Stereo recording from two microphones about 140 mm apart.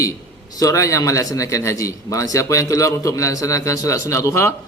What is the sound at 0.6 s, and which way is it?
A man's voice, 25° left (ahead or behind).